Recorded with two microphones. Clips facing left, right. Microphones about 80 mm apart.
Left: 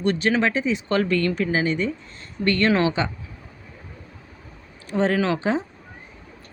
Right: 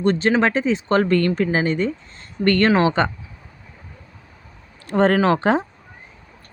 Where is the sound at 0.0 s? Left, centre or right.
Right.